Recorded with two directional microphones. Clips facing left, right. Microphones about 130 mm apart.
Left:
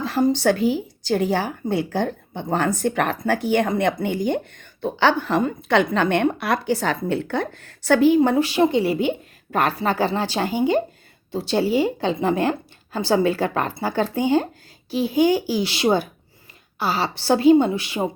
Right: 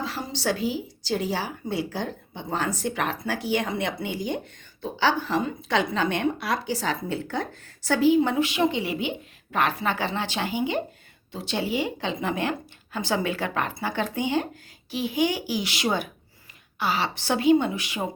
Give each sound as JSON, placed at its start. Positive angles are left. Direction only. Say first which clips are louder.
{"t": 0.0, "sound": "a woman's voice", "louder": "left 10 dB", "side_deg": 50}